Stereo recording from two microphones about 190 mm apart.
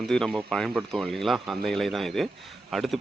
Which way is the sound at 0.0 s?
5° left (ahead or behind).